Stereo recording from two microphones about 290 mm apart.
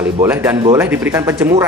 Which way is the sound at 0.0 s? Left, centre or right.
Centre.